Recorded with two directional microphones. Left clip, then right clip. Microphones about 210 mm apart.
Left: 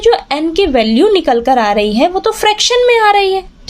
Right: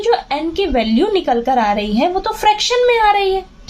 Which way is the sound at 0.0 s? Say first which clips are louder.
Left 5 dB; 45° left (ahead or behind).